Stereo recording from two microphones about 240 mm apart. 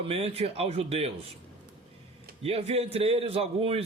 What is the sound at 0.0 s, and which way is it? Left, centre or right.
A man's voice, right.